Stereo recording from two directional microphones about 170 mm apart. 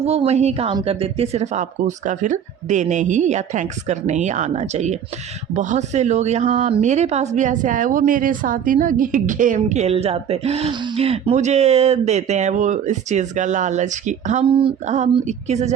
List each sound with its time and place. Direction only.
0.0 s a woman's voice: 35° right (ahead or behind)